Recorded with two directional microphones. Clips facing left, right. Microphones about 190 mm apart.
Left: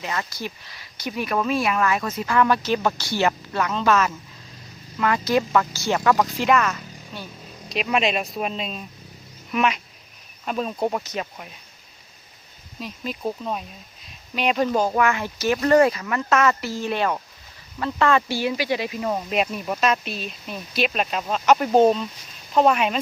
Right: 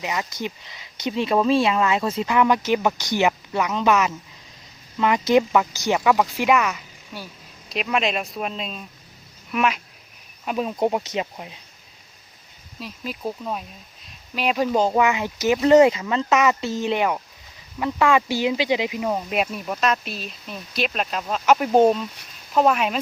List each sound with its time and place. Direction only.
0.0 s speech: 15° right (ahead or behind)
7.7 s speech: centre (ahead or behind); by 11.5 s 20° right (ahead or behind)
12.8 s speech: centre (ahead or behind)
14.8 s speech: 20° right (ahead or behind); by 23.0 s centre (ahead or behind)